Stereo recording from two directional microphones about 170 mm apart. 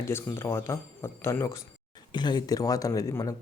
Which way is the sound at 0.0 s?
15° left (ahead or behind).